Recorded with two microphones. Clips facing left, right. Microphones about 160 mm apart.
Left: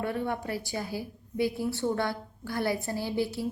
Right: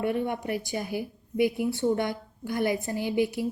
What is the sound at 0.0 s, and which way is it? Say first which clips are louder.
A woman's voice: right 3 dB; 15° right (ahead or behind).